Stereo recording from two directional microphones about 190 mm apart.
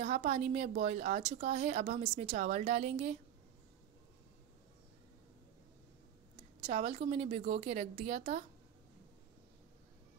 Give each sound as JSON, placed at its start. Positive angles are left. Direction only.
{"t": 0.0, "sound": "a woman's voice", "side_deg": -35}
{"t": 6.6, "sound": "a woman's voice", "side_deg": -30}